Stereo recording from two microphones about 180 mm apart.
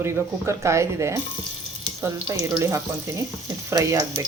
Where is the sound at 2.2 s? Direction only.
15° right (ahead or behind).